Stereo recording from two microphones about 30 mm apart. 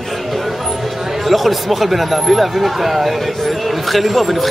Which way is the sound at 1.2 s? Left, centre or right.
Centre.